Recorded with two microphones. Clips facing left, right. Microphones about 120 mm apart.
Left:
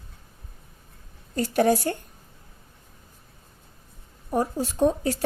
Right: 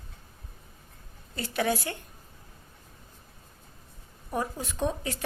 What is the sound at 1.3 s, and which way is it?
Speech, 40° left (ahead or behind).